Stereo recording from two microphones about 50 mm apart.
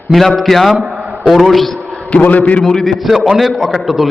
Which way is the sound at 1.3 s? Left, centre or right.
Centre.